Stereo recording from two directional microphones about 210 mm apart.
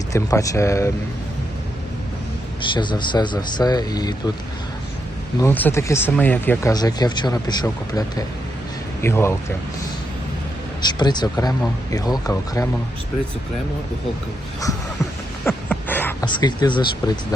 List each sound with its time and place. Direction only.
0.1 s speech: 15° left (ahead or behind)
2.6 s speech: 20° left (ahead or behind)
5.4 s speech: 10° left (ahead or behind)
10.8 s speech: 20° left (ahead or behind)
15.4 s a sound: 10° left (ahead or behind)
16.2 s speech: 20° left (ahead or behind)